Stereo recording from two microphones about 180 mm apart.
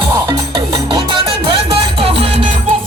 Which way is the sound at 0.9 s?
30° right (ahead or behind).